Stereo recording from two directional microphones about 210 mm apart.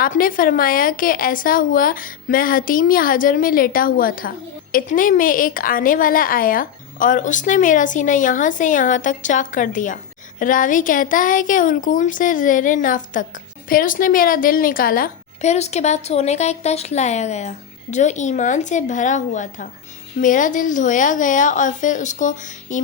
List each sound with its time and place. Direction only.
0.0 s a woman's voice: 40° left (ahead or behind)